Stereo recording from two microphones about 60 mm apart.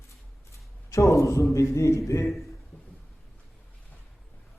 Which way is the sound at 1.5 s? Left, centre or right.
Left.